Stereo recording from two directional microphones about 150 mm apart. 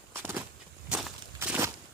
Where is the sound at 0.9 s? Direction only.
5° right (ahead or behind).